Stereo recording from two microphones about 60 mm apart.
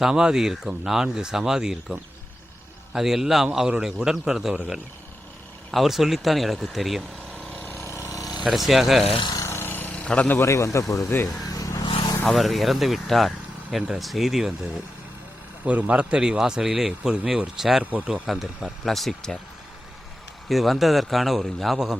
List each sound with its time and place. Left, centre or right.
0.0 s a man's voice: centre
5.7 s speech: centre
7.6 s vehicle: left
7.9 s a sound: left
8.4 s speech: centre
9.4 s a sound: left
9.9 s a sound: centre
10.3 s a man's voice: left
11.4 s vehicle: left
12.3 s speech: centre
15.6 s a man's voice: right; by 19.4 s centre
20.5 s speech: centre